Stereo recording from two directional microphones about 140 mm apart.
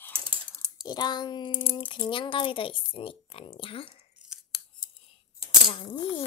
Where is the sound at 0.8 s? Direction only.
30° left (ahead or behind).